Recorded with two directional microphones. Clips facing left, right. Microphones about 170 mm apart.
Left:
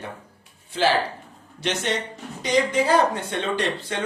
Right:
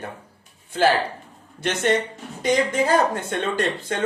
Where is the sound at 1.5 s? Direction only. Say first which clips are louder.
Right 4 dB; 50° right (ahead or behind).